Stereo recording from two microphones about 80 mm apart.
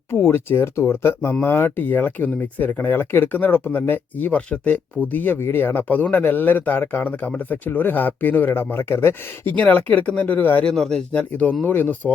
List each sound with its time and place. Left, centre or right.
0.1 s speech: left
10.7 s speech: centre